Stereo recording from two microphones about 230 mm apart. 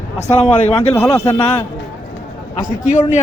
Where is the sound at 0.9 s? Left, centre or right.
Centre.